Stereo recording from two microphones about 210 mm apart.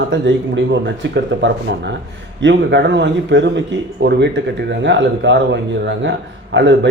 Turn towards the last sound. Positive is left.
turn(degrees=-60)  # may be behind; listen again after turning